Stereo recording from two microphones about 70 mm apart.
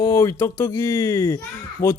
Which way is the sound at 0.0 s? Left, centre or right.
Left.